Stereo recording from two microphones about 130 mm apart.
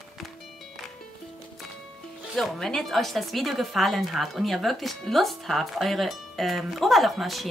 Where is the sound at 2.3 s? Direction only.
5° left (ahead or behind).